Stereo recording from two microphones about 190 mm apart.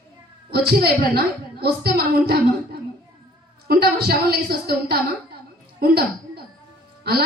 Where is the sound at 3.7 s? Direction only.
55° right (ahead or behind).